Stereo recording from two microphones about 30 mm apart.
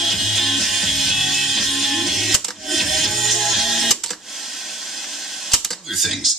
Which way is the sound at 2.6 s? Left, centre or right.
Centre.